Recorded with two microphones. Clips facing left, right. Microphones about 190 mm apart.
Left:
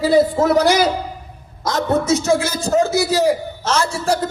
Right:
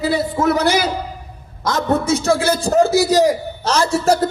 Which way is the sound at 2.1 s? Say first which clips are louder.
Right 1 dB; 60° right (ahead or behind).